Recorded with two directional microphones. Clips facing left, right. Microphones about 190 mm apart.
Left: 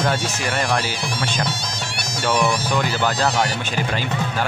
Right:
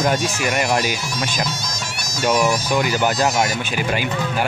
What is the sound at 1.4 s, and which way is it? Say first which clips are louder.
Insect: even; 30° left (ahead or behind).